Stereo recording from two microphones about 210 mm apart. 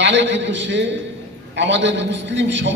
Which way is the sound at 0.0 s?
60° right (ahead or behind).